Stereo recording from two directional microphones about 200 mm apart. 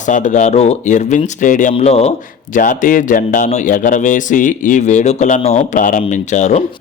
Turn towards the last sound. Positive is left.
turn(degrees=35)  # may be behind; listen again after turning